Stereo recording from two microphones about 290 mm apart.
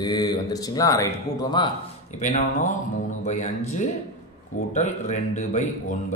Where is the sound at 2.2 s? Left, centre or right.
Left.